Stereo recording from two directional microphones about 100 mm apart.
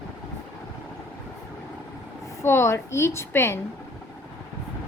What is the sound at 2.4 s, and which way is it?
A woman's voice, 25° left (ahead or behind).